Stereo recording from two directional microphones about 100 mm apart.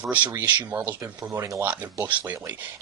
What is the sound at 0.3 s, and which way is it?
Speech, 20° right (ahead or behind).